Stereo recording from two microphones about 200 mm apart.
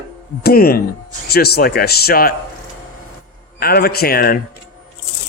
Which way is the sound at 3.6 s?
50° left (ahead or behind).